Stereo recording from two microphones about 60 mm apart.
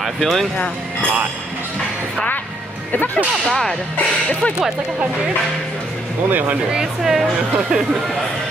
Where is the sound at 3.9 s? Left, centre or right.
Left.